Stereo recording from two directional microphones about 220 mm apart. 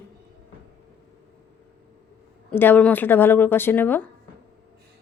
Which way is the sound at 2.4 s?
10° left (ahead or behind).